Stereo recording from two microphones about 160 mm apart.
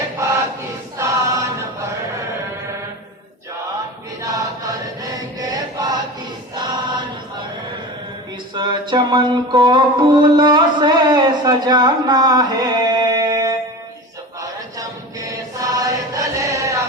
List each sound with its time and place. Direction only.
0.2 s choir: 20° right (ahead or behind)
4.2 s chant: 20° right (ahead or behind)
8.5 s music: 30° right (ahead or behind)
14.4 s chant: 20° right (ahead or behind)